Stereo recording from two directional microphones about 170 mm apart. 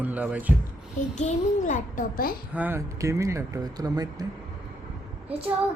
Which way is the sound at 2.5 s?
10° right (ahead or behind).